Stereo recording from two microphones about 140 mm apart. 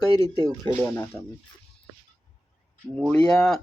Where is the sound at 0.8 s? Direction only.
15° left (ahead or behind).